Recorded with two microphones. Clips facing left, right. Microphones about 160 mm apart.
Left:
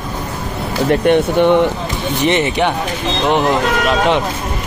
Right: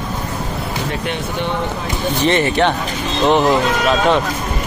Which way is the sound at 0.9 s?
55° left (ahead or behind).